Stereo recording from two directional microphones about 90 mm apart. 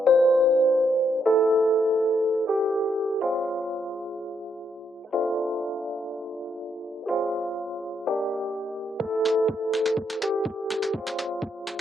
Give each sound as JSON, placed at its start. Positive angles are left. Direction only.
{"t": 0.0, "sound": "music", "side_deg": 0}
{"t": 5.1, "sound": "music", "side_deg": 0}
{"t": 7.1, "sound": "music", "side_deg": 0}